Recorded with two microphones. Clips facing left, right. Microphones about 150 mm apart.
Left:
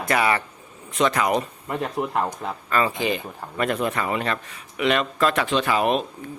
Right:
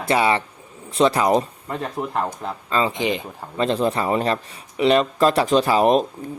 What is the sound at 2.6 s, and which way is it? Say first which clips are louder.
Speech: right 1 dB; 20° right (ahead or behind).